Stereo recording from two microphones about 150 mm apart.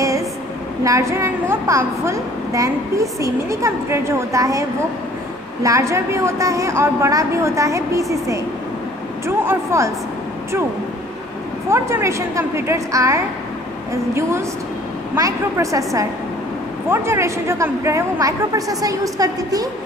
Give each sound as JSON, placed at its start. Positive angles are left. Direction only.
{"t": 0.8, "sound": "a woman's voice", "side_deg": -20}
{"t": 9.4, "sound": "a woman's voice", "side_deg": -15}
{"t": 11.7, "sound": "a woman's voice", "side_deg": -20}
{"t": 15.1, "sound": "a woman's voice", "side_deg": -20}